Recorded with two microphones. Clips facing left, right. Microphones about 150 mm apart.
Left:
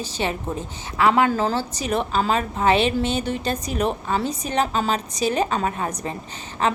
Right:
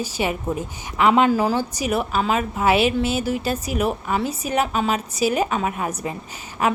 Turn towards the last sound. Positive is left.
turn(degrees=-10)  # may be behind; listen again after turning